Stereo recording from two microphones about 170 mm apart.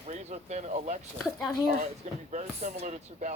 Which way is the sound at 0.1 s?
40° right (ahead or behind).